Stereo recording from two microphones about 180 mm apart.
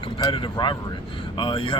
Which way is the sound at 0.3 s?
25° left (ahead or behind).